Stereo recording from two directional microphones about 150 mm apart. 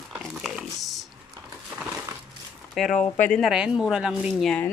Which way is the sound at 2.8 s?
Centre (ahead or behind).